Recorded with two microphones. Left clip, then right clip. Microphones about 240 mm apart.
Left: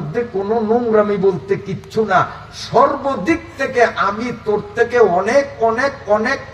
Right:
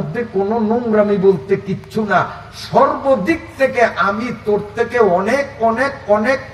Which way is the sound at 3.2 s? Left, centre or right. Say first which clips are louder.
Right 2 dB; left.